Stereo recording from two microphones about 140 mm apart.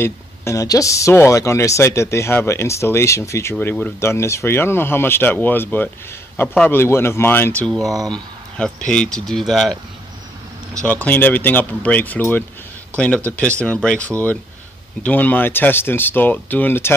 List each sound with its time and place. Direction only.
0.0 s speech: 20° left (ahead or behind)
7.8 s speech: 25° right (ahead or behind)
8.1 s speech: 5° left (ahead or behind)
10.8 s speech: 10° left (ahead or behind)